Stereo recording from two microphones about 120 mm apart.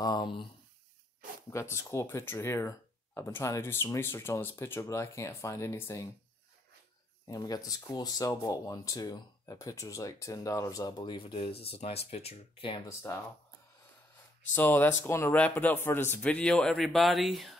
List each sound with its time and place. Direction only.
0.0 s speech: 40° left (ahead or behind)
1.5 s speech: 25° left (ahead or behind)
7.2 s speech: 30° left (ahead or behind)
11.3 s speech: 50° left (ahead or behind)
12.8 s speech: 25° left (ahead or behind)
14.5 s speech: 20° left (ahead or behind); by 17.6 s centre (ahead or behind)